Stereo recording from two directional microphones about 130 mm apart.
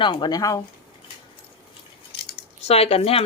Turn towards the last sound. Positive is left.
turn(degrees=50)  # may be behind; listen again after turning